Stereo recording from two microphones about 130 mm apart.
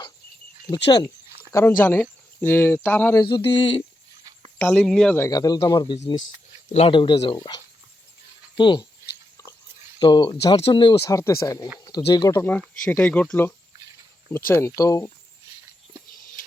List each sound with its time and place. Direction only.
1.5 s speech: 15° left (ahead or behind)
3.2 s speech: 35° left (ahead or behind)
4.5 s speech: 5° left (ahead or behind)
5.1 s speech: 25° left (ahead or behind)
6.7 s speech: 40° left (ahead or behind)
10.0 s speech: 40° left (ahead or behind)
11.1 s speech: 25° left (ahead or behind)
12.4 s speech: 15° left (ahead or behind)